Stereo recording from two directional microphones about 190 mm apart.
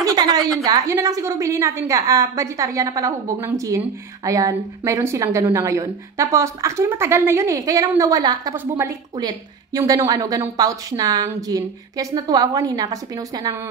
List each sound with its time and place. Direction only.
0.0 s a woman's voice: 20° right (ahead or behind)